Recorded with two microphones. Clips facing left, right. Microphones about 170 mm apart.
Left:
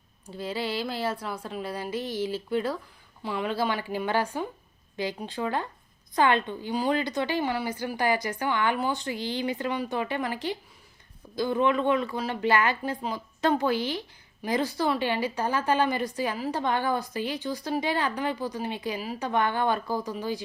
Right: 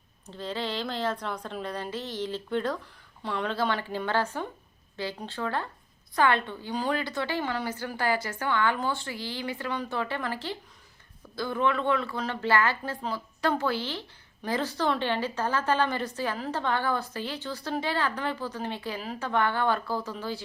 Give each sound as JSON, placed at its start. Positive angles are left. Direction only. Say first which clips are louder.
{"t": 0.3, "sound": "a woman's voice", "louder": "left 2 dB", "side_deg": 10}